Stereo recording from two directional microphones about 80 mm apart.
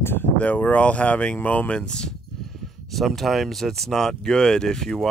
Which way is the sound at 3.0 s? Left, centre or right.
Centre.